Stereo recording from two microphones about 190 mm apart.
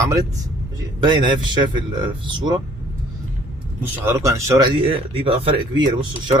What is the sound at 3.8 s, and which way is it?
Speech, 15° right (ahead or behind).